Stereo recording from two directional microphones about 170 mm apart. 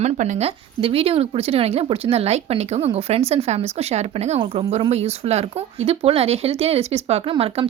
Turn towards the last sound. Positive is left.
turn(degrees=-35)  # may be behind; listen again after turning